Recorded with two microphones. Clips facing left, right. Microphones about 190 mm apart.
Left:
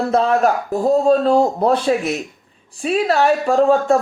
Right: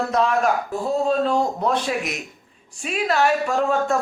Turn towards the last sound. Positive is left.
turn(degrees=35)  # may be behind; listen again after turning